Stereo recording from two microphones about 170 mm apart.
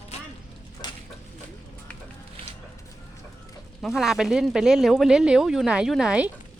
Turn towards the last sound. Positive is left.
turn(degrees=-5)  # may be behind; listen again after turning